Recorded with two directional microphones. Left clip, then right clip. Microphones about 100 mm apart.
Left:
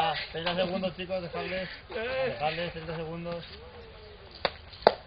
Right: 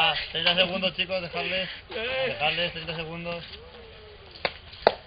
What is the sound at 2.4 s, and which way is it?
A man's voice, 25° right (ahead or behind).